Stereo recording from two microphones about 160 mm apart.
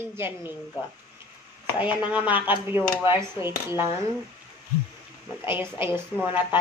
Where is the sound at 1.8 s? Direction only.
10° right (ahead or behind).